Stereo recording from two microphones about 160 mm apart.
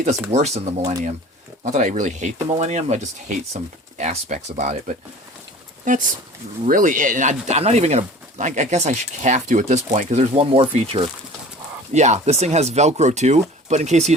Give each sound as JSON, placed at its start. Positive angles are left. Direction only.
{"t": 0.0, "sound": "speech", "side_deg": -45}